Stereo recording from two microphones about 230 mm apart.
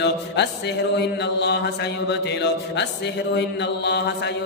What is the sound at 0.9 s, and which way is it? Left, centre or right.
Mantra, left.